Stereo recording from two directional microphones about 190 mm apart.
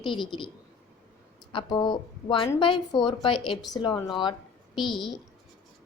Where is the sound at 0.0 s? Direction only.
25° left (ahead or behind).